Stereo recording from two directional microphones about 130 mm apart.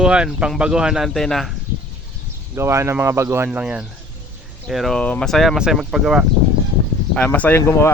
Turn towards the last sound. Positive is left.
turn(degrees=20)  # may be behind; listen again after turning